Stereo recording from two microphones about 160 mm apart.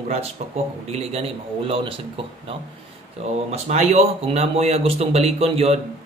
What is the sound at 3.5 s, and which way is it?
A man's voice, 45° right (ahead or behind).